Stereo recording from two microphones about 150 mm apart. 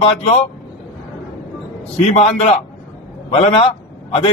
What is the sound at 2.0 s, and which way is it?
A man's voice, 45° left (ahead or behind).